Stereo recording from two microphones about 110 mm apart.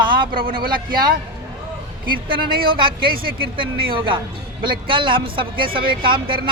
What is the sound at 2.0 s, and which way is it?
Speech, 50° right (ahead or behind).